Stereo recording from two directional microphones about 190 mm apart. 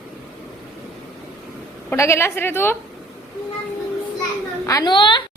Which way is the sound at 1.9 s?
15° left (ahead or behind).